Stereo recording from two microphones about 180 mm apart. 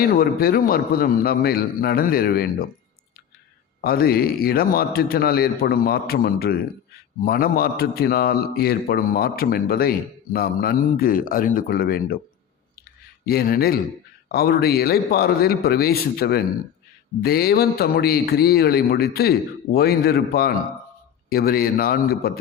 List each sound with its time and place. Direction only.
0.2 s a man's voice: 55° left (ahead or behind)
3.8 s a man's voice: 55° left (ahead or behind)
13.2 s a man's voice: 60° left (ahead or behind)